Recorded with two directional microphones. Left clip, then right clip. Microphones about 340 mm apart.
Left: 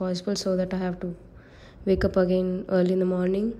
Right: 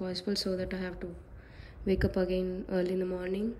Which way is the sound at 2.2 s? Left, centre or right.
Centre.